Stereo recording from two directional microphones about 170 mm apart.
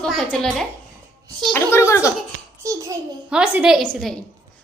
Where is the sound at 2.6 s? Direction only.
20° right (ahead or behind).